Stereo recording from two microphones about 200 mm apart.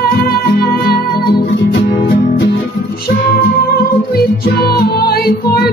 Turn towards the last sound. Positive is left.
turn(degrees=50)  # may be behind; listen again after turning